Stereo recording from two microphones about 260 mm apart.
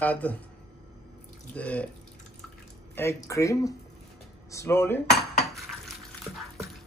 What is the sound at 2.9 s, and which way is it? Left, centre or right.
Speech, centre.